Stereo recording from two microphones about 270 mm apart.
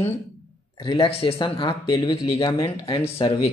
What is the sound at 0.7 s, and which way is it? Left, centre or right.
A man's voice, centre.